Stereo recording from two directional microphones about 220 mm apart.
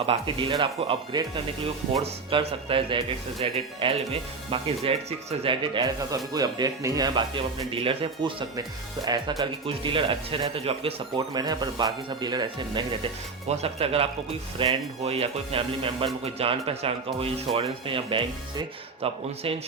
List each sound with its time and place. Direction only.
0.0 s speech: 25° right (ahead or behind)